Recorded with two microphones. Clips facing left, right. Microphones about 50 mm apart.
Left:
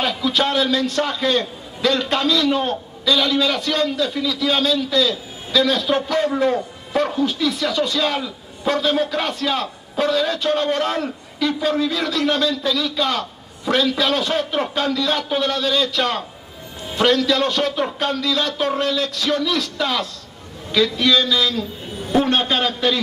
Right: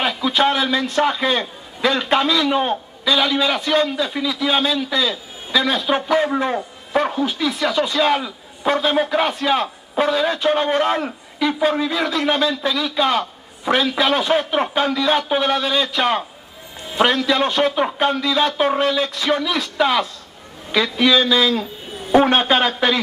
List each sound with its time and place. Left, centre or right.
0.2 s a man's voice: centre